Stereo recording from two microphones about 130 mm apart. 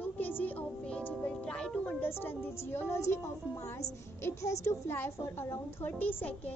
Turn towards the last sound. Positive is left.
turn(degrees=10)  # may be behind; listen again after turning